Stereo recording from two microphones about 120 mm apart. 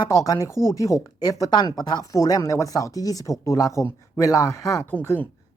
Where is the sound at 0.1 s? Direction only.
25° left (ahead or behind).